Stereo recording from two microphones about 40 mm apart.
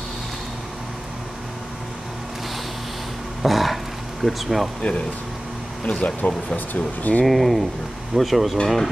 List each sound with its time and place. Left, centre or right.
3.4 s a sound: centre
5.9 s speech: left
7.2 s speech: centre